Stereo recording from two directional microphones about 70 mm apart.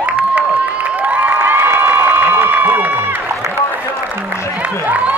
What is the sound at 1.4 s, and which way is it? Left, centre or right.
Crowd, right.